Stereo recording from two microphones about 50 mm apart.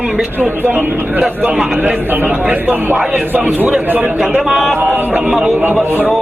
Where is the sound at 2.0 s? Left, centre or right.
Right.